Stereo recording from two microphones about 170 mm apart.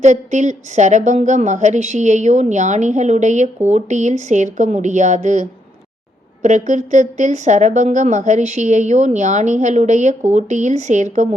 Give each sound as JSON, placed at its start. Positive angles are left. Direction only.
{"t": 0.0, "sound": "a woman's voice", "side_deg": -45}